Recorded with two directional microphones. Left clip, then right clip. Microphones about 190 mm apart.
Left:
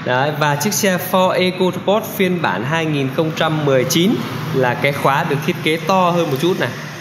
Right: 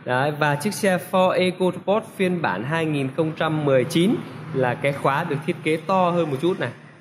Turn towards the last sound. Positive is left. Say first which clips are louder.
# left 6 dB
turn(degrees=-15)  # may be behind; listen again after turning